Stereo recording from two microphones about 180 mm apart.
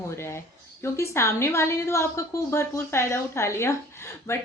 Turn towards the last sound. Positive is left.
turn(degrees=15)  # may be behind; listen again after turning